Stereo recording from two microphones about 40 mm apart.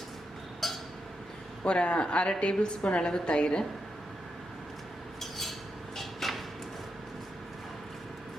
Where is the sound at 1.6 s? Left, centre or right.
Left.